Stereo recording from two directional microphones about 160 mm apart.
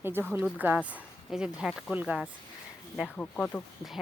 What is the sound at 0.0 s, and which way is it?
Speech, 15° right (ahead or behind).